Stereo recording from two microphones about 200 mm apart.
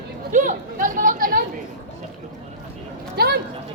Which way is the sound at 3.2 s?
55° right (ahead or behind).